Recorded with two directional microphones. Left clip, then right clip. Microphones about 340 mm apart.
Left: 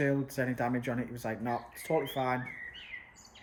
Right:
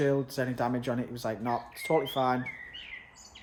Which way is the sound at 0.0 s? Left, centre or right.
Centre.